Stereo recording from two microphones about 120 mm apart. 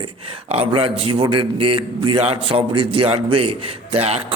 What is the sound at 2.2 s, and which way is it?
A man's voice, 55° right (ahead or behind).